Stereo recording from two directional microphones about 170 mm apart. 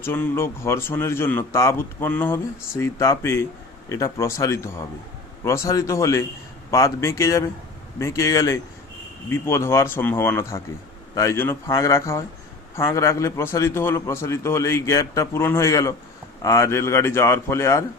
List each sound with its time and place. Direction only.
0.0 s speech: 15° left (ahead or behind)